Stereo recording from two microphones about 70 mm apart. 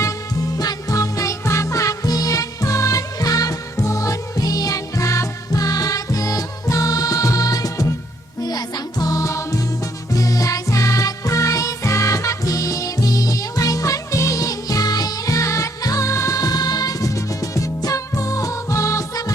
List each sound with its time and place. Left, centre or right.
0.5 s music: left
8.4 s music: left